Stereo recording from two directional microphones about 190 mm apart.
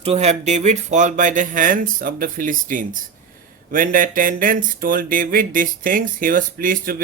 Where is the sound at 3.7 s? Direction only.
45° right (ahead or behind).